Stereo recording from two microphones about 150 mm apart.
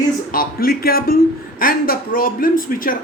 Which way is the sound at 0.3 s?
80° left.